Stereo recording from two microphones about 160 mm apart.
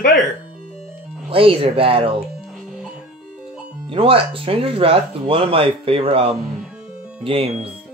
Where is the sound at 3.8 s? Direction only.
35° right (ahead or behind).